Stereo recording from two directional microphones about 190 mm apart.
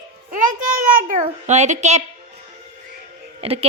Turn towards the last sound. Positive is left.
turn(degrees=-30)  # may be behind; listen again after turning